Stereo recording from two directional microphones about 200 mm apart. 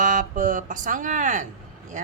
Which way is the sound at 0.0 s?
40° right (ahead or behind).